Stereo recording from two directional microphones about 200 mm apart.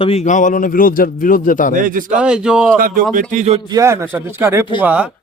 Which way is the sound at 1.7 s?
40° right (ahead or behind).